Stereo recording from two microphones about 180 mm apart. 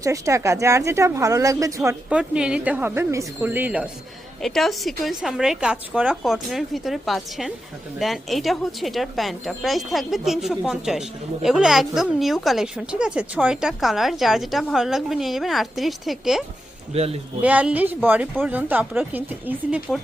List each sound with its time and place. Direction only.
0.0 s speech: 15° right (ahead or behind)
2.0 s speech: 5° right (ahead or behind)
16.9 s speech: 35° right (ahead or behind)
17.4 s speech: 10° right (ahead or behind)